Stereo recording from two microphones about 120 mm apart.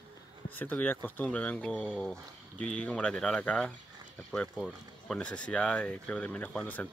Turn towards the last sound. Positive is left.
turn(degrees=10)  # may be behind; listen again after turning